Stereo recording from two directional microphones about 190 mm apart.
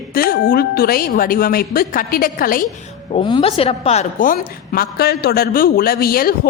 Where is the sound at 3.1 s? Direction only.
25° left (ahead or behind).